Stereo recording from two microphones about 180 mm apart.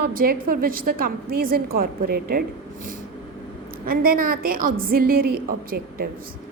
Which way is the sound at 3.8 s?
55° right (ahead or behind).